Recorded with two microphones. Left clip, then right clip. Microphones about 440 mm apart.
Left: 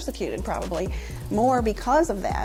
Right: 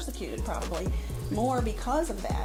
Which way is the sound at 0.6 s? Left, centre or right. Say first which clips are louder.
Left 6 dB; centre.